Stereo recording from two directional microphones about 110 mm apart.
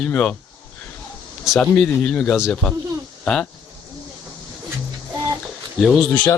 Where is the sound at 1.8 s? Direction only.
10° left (ahead or behind).